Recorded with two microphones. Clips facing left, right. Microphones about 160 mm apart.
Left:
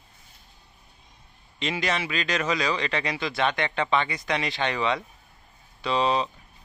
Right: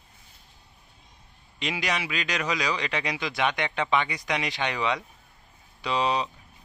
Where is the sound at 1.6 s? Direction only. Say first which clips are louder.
Left 2 dB; 10° right (ahead or behind).